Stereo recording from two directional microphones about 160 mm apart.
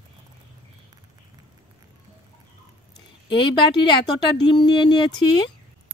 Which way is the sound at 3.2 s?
30° left (ahead or behind).